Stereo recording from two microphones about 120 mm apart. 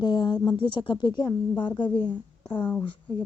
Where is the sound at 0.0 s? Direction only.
40° left (ahead or behind).